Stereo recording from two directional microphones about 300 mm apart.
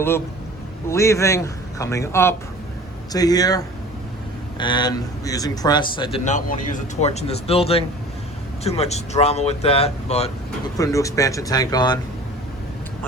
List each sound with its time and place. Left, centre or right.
0.9 s a man's voice: centre
10.8 s a man's voice: centre